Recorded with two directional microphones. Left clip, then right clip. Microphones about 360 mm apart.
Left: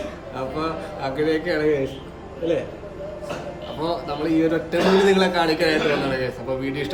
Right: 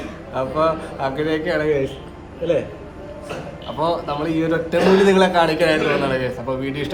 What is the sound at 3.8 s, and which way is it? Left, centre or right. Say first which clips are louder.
Speech: right 5 dB; centre.